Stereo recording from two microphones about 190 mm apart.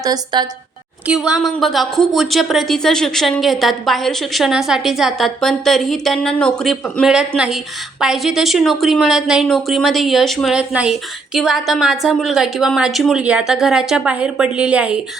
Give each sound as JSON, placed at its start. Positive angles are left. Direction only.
{"t": 0.0, "sound": "a woman's voice", "side_deg": -20}
{"t": 1.0, "sound": "a woman's voice", "side_deg": -5}